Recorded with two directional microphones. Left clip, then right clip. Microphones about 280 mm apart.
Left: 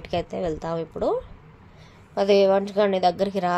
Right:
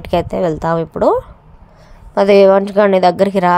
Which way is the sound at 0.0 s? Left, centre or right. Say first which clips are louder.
Right 11 dB; right.